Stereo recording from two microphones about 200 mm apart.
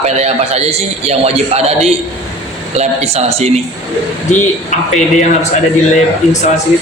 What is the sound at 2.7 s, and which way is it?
Speech, 30° right (ahead or behind).